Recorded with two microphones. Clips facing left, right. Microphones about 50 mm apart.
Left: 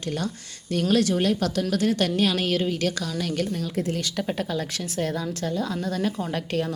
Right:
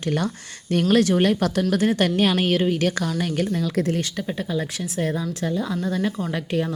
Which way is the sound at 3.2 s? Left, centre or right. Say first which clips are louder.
Even; centre.